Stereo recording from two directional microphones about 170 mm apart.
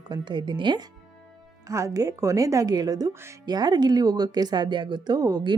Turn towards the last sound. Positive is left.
turn(degrees=-25)  # may be behind; listen again after turning